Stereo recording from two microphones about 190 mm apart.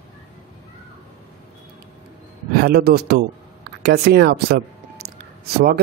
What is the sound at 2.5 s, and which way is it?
Speech, 55° right (ahead or behind).